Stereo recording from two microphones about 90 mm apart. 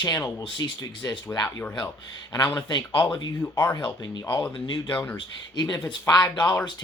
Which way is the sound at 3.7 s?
55° left (ahead or behind).